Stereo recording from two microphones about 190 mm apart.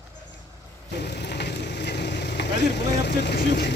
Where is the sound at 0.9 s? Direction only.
60° left (ahead or behind).